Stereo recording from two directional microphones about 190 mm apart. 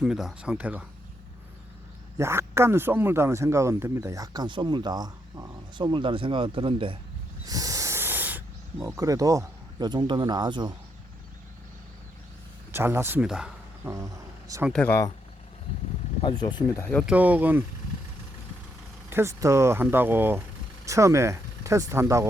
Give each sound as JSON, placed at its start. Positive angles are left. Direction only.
{"t": 0.0, "sound": "speech", "side_deg": -5}
{"t": 2.1, "sound": "a man's voice", "side_deg": -15}
{"t": 7.4, "sound": "snake", "side_deg": -20}
{"t": 12.7, "sound": "speech", "side_deg": -10}
{"t": 13.9, "sound": "speech", "side_deg": -15}
{"t": 14.7, "sound": "speech", "side_deg": 10}
{"t": 16.2, "sound": "speech", "side_deg": 25}
{"t": 17.1, "sound": "speech", "side_deg": -10}
{"t": 19.1, "sound": "speech", "side_deg": -15}